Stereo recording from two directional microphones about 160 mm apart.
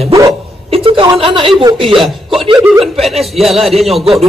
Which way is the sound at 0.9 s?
35° right (ahead or behind).